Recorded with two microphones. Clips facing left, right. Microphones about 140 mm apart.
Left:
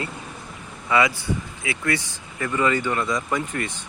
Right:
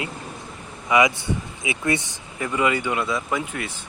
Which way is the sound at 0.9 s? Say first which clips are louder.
Right 2 dB; 20° right (ahead or behind).